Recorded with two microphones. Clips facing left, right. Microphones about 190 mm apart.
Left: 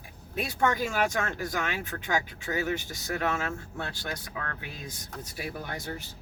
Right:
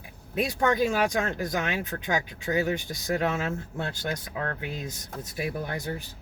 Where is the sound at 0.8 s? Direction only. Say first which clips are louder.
Right 4 dB; 20° right (ahead or behind).